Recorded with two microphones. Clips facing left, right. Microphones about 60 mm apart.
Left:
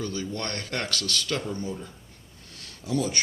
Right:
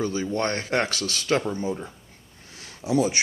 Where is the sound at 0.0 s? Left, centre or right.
Right.